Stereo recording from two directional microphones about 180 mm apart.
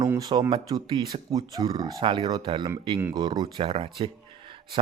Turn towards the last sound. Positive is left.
turn(degrees=-30)  # may be behind; listen again after turning